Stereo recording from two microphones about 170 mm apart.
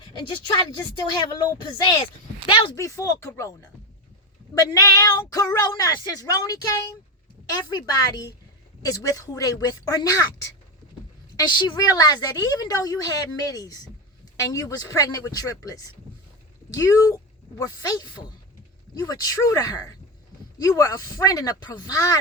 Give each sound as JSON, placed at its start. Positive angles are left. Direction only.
{"t": 0.0, "sound": "a woman's voice", "side_deg": 25}
{"t": 1.6, "sound": "a woman's voice", "side_deg": 25}
{"t": 4.5, "sound": "a woman's voice", "side_deg": 20}